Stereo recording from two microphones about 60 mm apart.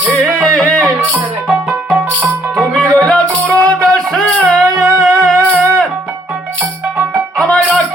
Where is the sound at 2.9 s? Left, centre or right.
Centre.